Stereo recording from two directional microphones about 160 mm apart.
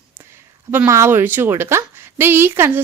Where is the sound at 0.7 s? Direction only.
15° right (ahead or behind).